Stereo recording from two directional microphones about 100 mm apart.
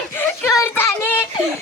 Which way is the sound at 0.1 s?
20° left (ahead or behind).